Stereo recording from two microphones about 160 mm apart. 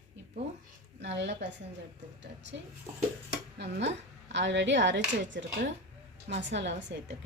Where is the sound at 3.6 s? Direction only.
90° right.